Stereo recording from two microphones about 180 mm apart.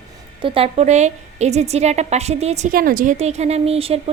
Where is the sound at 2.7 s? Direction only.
50° right (ahead or behind); by 4.1 s 35° right (ahead or behind).